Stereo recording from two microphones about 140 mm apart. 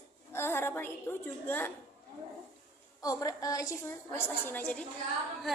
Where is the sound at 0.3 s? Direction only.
15° left (ahead or behind).